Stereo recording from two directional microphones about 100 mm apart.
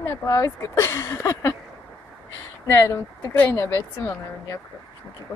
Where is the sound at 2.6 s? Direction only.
25° left (ahead or behind).